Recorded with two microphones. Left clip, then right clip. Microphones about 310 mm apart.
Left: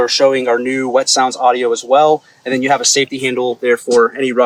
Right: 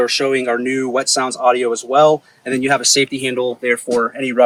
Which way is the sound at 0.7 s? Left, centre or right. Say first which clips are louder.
Left 4 dB; left.